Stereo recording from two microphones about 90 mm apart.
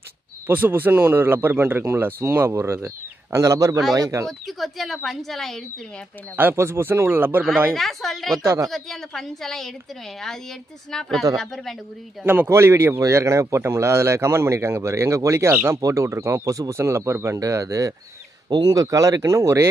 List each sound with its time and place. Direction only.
0.5 s a man's voice: 20° right (ahead or behind); by 4.3 s 35° right (ahead or behind)
4.3 s speech: centre (ahead or behind)
6.3 s a man's voice: 25° right (ahead or behind)
7.7 s speech: centre (ahead or behind)
10.9 s speech: 5° left (ahead or behind)
12.3 s a man's voice: 25° right (ahead or behind)